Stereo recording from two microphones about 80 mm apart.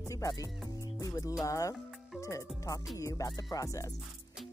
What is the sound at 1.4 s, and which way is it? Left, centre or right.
Speech, left.